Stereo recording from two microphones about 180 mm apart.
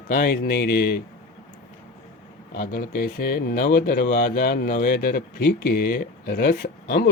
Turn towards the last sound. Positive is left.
turn(degrees=65)  # may be behind; listen again after turning